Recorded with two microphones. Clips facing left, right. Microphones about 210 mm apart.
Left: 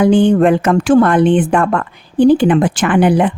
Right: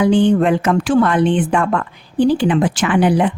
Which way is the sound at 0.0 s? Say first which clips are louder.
Left 3 dB; 45° left (ahead or behind).